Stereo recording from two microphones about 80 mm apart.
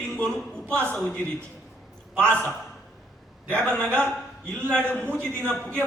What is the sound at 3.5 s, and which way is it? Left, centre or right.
A man's voice, centre.